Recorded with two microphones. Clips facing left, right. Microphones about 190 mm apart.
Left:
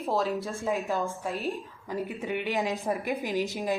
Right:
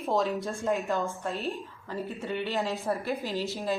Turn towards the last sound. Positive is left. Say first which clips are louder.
# left 2 dB
turn(degrees=15)  # may be behind; listen again after turning